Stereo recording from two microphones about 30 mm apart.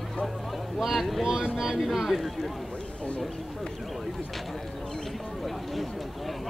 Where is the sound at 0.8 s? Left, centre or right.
Centre.